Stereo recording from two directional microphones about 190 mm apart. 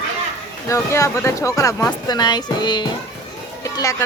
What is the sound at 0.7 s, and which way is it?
A woman's voice, 15° left (ahead or behind).